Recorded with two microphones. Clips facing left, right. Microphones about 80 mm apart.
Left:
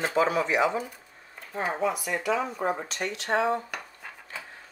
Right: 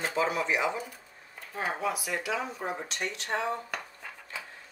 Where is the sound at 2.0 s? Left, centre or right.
Left.